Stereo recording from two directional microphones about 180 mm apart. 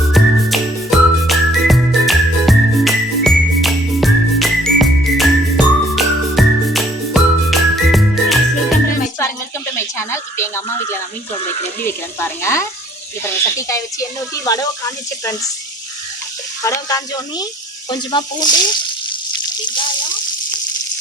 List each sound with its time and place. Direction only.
0.1 s music: centre (ahead or behind)
9.7 s a sound: 15° left (ahead or behind)
11.8 s speech: 15° left (ahead or behind)
16.6 s speech: 20° left (ahead or behind)